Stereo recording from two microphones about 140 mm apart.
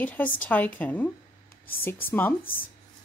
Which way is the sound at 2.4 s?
90° left.